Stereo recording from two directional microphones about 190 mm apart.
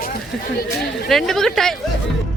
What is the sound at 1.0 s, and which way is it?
Speech, centre (ahead or behind).